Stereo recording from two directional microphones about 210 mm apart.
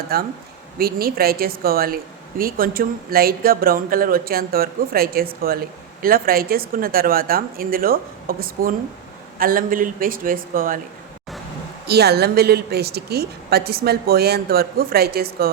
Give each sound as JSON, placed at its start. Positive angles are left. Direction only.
{"t": 0.1, "sound": "a woman's voice", "side_deg": -45}
{"t": 11.9, "sound": "a woman's voice", "side_deg": -50}